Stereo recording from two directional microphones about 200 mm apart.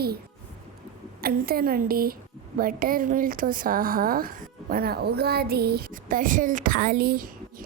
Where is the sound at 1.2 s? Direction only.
45° right (ahead or behind).